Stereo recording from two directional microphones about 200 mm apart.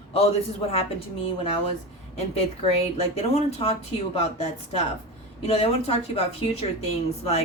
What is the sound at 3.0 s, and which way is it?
Speech, 30° left (ahead or behind).